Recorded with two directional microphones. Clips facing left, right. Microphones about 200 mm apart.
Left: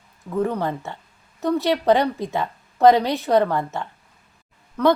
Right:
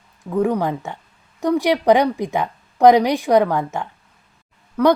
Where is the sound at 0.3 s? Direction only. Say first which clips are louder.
Right 4 dB; 15° right (ahead or behind).